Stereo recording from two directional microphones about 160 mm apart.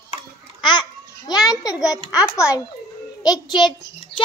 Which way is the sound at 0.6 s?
30° left (ahead or behind).